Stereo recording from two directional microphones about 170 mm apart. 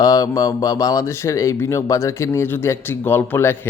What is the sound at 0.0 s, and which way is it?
Speech, 20° left (ahead or behind).